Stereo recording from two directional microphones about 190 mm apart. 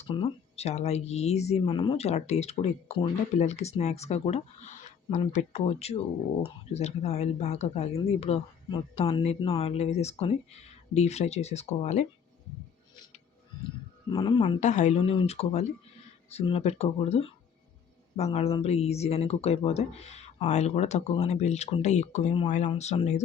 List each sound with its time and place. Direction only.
0.0 s speech: 30° left (ahead or behind)
14.1 s speech: 25° left (ahead or behind)
14.6 s speech: 40° left (ahead or behind)